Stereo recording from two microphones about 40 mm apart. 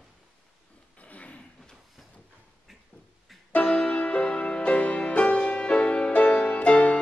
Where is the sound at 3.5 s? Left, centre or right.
Left.